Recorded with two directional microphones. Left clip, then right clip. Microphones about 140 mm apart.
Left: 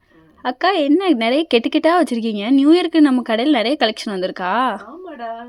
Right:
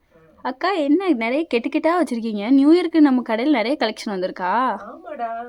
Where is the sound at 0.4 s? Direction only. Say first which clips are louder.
Left 4 dB; 25° left (ahead or behind).